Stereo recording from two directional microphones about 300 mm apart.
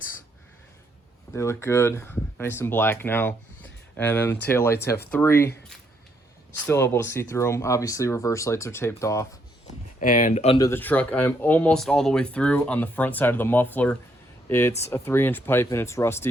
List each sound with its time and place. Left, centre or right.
1.3 s speech: centre
6.7 s speech: centre
10.0 s speech: left; by 16.2 s centre